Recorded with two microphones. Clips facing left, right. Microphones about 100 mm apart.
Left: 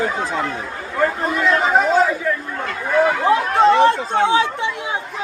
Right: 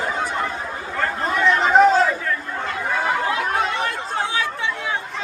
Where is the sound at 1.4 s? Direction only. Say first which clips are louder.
Right 2 dB; 5° left (ahead or behind).